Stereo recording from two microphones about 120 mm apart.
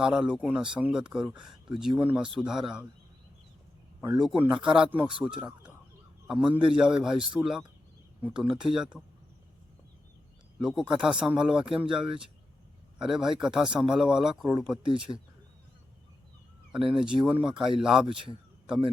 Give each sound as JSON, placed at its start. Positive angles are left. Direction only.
{"t": 0.0, "sound": "speech", "side_deg": -5}
{"t": 4.0, "sound": "a man's voice", "side_deg": -5}
{"t": 10.6, "sound": "speech", "side_deg": -5}
{"t": 16.9, "sound": "speech", "side_deg": -5}
{"t": 18.1, "sound": "a man's voice", "side_deg": -45}